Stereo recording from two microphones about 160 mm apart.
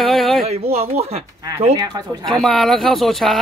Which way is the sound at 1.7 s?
25° right (ahead or behind).